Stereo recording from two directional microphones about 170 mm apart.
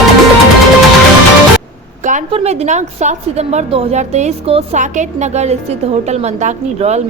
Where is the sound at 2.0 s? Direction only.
45° right (ahead or behind).